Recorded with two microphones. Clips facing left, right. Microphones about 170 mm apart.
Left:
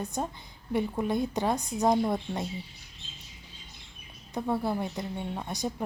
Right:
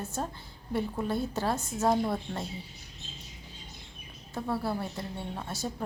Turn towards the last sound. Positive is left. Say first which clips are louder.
# left 3 dB
turn(degrees=15)  # may be behind; listen again after turning